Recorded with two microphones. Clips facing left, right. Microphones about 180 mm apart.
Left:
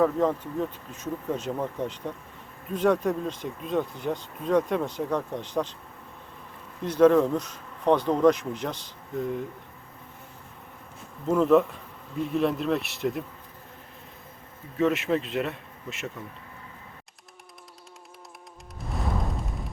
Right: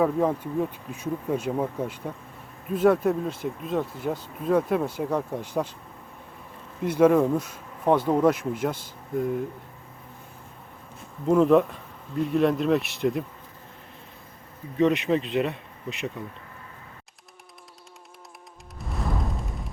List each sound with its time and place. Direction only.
0.0 s speech: 10° right (ahead or behind)
6.8 s speech: 10° right (ahead or behind)
11.3 s speech: centre (ahead or behind)
14.8 s speech: centre (ahead or behind)
18.8 s music: centre (ahead or behind)